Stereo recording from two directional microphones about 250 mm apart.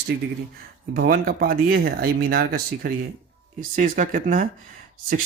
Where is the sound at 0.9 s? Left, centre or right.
Right.